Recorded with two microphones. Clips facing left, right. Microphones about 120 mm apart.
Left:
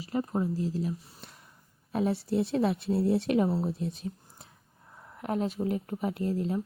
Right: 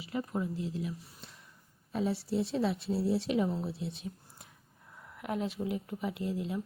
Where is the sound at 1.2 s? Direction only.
60° left (ahead or behind).